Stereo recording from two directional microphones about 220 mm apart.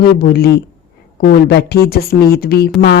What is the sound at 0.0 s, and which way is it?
A woman's voice, 45° left (ahead or behind).